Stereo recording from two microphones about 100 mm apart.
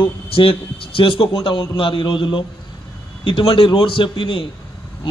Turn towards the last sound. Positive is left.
turn(degrees=60)  # may be behind; listen again after turning